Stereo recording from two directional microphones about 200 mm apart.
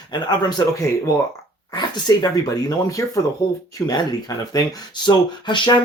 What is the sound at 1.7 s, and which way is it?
Speech, 20° left (ahead or behind).